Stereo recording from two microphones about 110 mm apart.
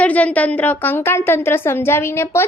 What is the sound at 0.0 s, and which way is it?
A woman's voice, 10° left (ahead or behind).